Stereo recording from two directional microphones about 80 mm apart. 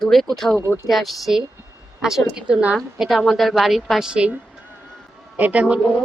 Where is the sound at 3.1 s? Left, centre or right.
Centre.